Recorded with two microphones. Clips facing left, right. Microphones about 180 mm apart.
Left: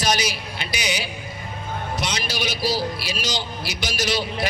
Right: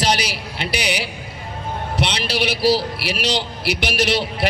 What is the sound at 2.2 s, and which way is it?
A man's voice, 65° right (ahead or behind).